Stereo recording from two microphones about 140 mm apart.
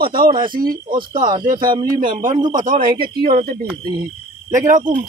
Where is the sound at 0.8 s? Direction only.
35° right (ahead or behind).